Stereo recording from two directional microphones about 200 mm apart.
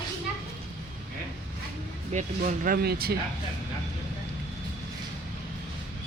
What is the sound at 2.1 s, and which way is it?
Speech, 40° right (ahead or behind).